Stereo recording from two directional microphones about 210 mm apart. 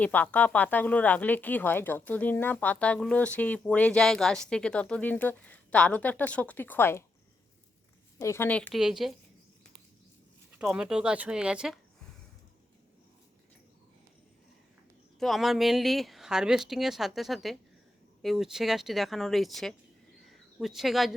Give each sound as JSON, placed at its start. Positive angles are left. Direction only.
{"t": 0.0, "sound": "speech", "side_deg": 5}
{"t": 8.2, "sound": "speech", "side_deg": 10}
{"t": 10.6, "sound": "speech", "side_deg": -5}
{"t": 15.2, "sound": "speech", "side_deg": 0}
{"t": 20.2, "sound": "a sound", "side_deg": 0}